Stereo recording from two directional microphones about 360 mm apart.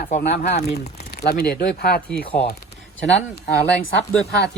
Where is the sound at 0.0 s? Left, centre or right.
Left.